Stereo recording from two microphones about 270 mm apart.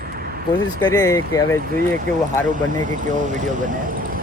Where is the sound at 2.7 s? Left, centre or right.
Right.